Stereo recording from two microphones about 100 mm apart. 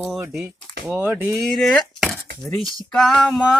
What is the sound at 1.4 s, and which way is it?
Speech, centre (ahead or behind).